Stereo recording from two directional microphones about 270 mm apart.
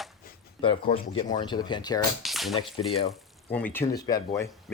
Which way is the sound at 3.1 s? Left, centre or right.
Centre.